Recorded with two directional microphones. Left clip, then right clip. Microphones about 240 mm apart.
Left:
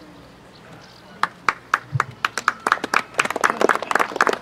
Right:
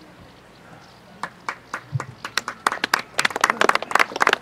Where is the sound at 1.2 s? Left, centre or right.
Centre.